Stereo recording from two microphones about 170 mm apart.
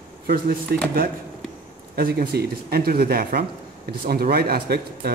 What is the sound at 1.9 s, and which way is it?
Speech, 65° right (ahead or behind).